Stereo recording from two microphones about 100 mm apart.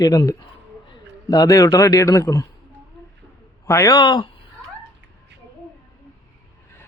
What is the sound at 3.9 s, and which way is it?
Speech, 45° left (ahead or behind).